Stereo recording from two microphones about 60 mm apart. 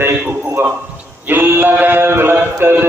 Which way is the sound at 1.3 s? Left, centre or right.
Right.